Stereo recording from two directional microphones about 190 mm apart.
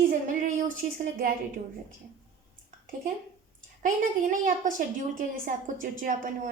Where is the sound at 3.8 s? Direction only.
40° right (ahead or behind).